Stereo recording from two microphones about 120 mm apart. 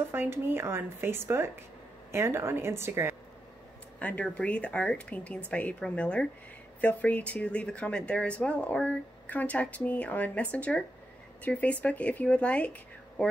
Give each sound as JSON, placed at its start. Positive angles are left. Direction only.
{"t": 0.1, "sound": "speech", "side_deg": -20}
{"t": 4.0, "sound": "speech", "side_deg": 10}